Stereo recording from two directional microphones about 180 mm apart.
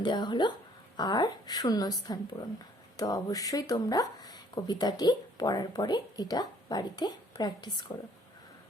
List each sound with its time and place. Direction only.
0.0 s speech: 25° left (ahead or behind)